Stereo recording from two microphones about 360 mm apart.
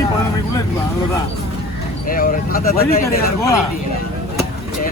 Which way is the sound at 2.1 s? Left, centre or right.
Left.